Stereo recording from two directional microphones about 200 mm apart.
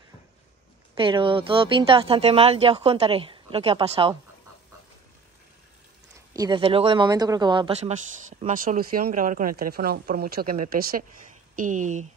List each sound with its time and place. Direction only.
0.9 s speech: 25° right (ahead or behind)
6.3 s speech: 20° right (ahead or behind); by 12.1 s 40° right (ahead or behind)